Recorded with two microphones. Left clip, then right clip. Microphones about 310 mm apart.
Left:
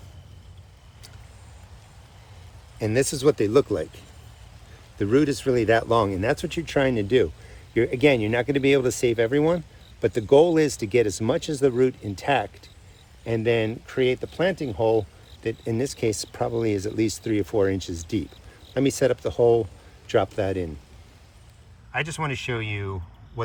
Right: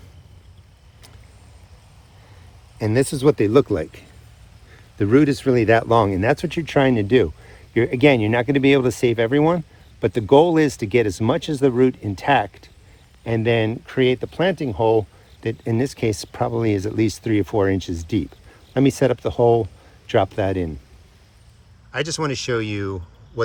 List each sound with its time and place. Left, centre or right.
2.7 s speech: right
21.9 s speech: centre